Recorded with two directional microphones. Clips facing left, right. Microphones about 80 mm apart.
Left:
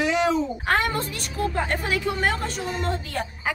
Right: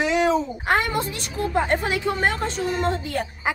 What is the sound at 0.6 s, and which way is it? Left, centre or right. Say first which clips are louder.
A woman's voice: right 2 dB; centre.